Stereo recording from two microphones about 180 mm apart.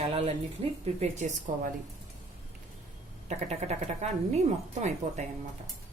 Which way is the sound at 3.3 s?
40° right (ahead or behind).